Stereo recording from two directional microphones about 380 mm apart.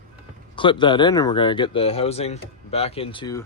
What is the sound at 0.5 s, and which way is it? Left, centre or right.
Speech, centre.